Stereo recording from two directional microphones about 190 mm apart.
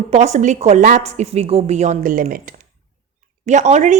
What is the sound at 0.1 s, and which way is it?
Speech, 35° right (ahead or behind).